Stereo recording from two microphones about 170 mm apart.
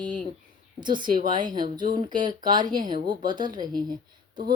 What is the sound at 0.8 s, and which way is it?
Speech, 25° right (ahead or behind).